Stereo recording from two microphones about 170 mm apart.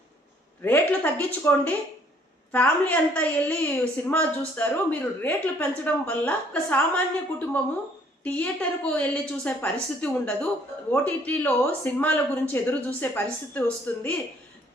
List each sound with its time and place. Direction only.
0.6 s a woman's voice: 10° left (ahead or behind)